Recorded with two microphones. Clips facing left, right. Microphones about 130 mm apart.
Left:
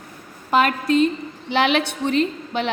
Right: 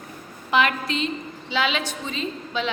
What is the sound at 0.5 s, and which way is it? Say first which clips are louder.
A woman's voice: left 5 dB; 45° left (ahead or behind).